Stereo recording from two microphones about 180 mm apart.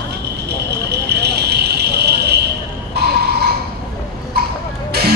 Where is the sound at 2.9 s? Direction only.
65° right (ahead or behind).